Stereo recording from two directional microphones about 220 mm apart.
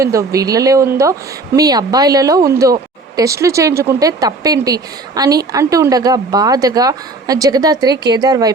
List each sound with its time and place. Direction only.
0.0 s speech: 15° right (ahead or behind)